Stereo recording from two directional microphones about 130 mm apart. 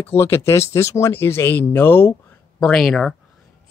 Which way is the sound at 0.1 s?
20° left (ahead or behind).